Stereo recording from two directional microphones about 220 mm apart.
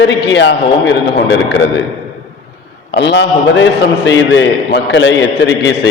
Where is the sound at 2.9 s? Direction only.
50° left (ahead or behind).